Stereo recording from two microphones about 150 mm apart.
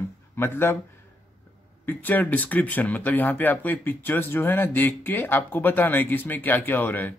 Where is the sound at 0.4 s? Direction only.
15° left (ahead or behind).